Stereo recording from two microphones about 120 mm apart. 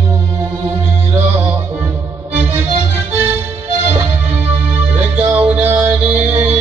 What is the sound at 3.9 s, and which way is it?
Music, 15° right (ahead or behind).